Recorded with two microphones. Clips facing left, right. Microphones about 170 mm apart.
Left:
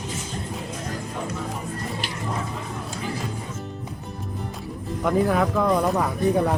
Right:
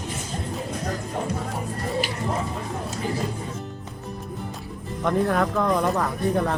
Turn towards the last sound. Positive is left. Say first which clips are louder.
# left 2 dB
turn(degrees=10)  # may be behind; listen again after turning